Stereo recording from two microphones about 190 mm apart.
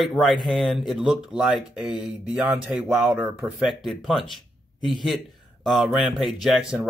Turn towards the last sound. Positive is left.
turn(degrees=0)  # may be behind; listen again after turning